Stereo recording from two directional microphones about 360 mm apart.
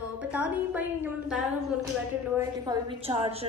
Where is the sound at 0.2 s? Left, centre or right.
Centre.